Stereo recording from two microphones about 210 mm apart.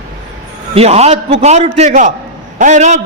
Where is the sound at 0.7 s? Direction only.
30° right (ahead or behind).